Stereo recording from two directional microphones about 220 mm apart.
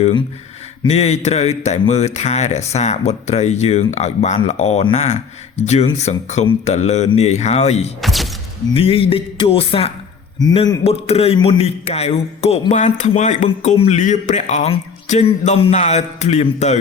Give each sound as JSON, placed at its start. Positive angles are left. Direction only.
{"t": 0.9, "sound": "speech", "side_deg": 30}
{"t": 8.0, "sound": "a sound", "side_deg": 0}
{"t": 8.7, "sound": "a man's voice", "side_deg": 25}